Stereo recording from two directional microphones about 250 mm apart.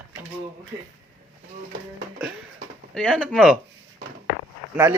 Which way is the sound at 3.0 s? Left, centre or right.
Centre.